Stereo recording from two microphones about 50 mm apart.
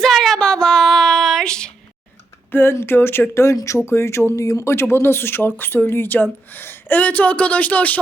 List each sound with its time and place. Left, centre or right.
0.0 s a sound: centre
0.3 s music: centre
1.5 s a sound: centre
2.5 s speech: left
3.4 s speech: left
7.0 s speech: left